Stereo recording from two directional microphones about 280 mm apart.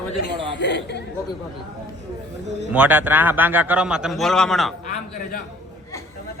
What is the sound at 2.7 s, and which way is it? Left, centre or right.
A man's voice, centre.